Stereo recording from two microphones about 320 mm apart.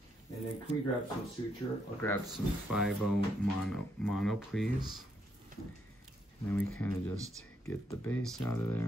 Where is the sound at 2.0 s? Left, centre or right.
Centre.